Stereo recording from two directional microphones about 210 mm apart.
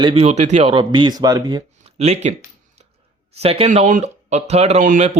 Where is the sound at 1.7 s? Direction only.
30° right (ahead or behind).